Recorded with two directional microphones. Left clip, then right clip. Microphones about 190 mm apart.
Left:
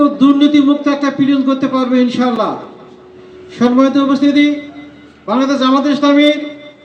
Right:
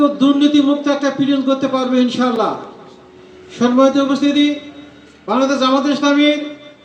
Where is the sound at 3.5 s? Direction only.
55° left (ahead or behind).